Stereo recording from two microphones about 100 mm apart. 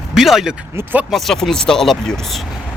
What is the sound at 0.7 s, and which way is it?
Speech, 15° right (ahead or behind).